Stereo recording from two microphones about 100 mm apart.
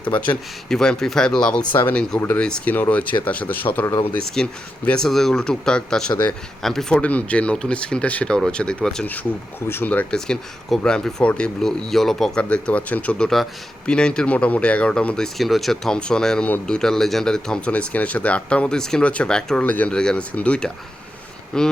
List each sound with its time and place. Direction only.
0.7 s speech: 5° left (ahead or behind)
1.7 s speech: 20° left (ahead or behind); by 9.0 s 5° left (ahead or behind)
9.0 s speech: 20° left (ahead or behind)